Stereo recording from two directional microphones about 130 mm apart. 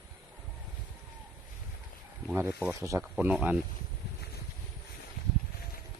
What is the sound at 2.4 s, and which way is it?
Speech, 20° right (ahead or behind).